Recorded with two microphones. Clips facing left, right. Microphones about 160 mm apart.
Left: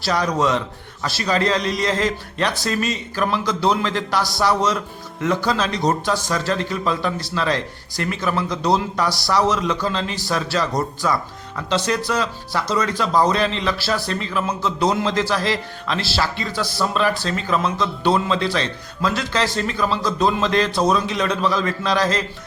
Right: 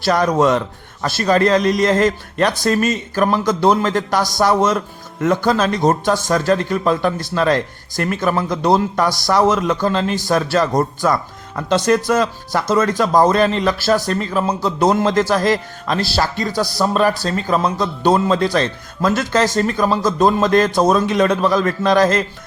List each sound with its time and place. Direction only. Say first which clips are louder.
0.0 s a man's voice: right 5 dB; 50° right (ahead or behind)